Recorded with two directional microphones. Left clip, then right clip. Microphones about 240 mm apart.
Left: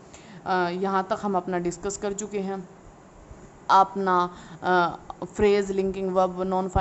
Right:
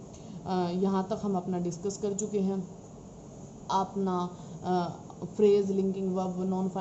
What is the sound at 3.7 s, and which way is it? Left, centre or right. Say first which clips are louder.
Speech: left 11 dB; left.